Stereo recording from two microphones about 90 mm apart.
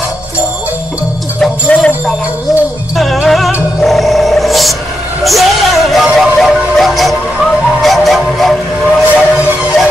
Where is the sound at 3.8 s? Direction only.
Centre (ahead or behind).